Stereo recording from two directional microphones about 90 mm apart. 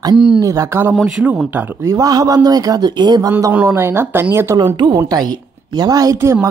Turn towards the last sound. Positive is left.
turn(degrees=-45)  # may be behind; listen again after turning